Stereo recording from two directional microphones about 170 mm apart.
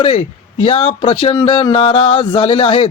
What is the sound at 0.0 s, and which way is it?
A man's voice, 35° left (ahead or behind).